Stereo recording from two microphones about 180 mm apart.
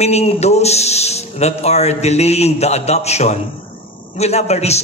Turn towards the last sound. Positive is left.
turn(degrees=35)  # may be behind; listen again after turning